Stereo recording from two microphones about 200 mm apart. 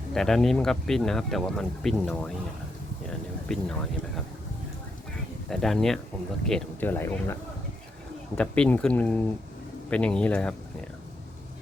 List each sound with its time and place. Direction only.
0.1 s speech: 5° left (ahead or behind)
5.5 s speech: centre (ahead or behind)
8.4 s speech: 5° left (ahead or behind)